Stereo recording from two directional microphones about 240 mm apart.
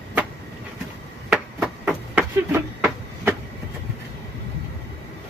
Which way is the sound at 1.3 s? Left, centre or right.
Centre.